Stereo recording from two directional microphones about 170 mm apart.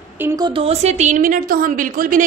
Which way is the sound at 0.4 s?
30° right (ahead or behind).